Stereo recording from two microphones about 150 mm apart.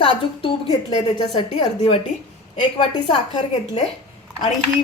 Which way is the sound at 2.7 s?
40° left (ahead or behind).